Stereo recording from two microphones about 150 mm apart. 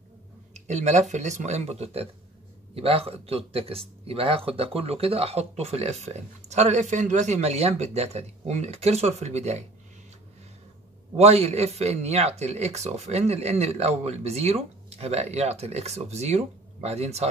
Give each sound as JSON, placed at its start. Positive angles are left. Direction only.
{"t": 0.7, "sound": "speech", "side_deg": -50}
{"t": 11.1, "sound": "speech", "side_deg": -45}